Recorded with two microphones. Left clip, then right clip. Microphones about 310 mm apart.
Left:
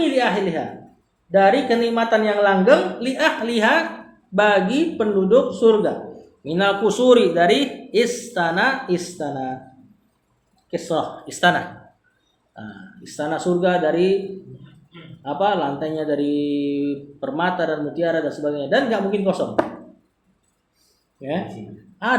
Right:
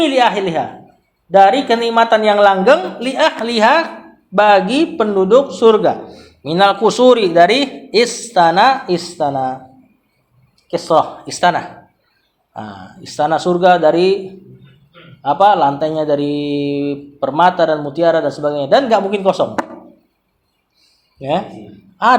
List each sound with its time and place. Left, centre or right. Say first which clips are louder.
0.0 s speech: right 6 dB; centre
10.7 s speech: right 10 dB; centre
15.2 s speech: right 10 dB; centre
21.2 s speech: right 9 dB; right